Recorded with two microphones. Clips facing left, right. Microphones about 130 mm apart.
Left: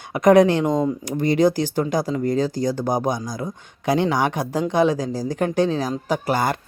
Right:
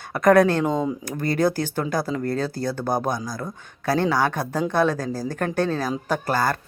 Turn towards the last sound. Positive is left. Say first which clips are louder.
# left 2 dB
turn(degrees=15)  # may be behind; listen again after turning